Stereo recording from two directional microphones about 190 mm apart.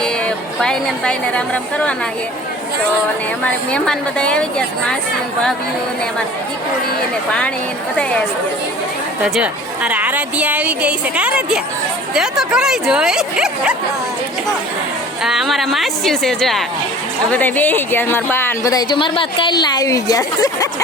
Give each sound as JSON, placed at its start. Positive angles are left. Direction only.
{"t": 0.0, "sound": "a woman's voice", "side_deg": 5}
{"t": 3.4, "sound": "speech", "side_deg": 5}
{"t": 9.2, "sound": "a woman's voice", "side_deg": -5}
{"t": 15.2, "sound": "speech", "side_deg": 0}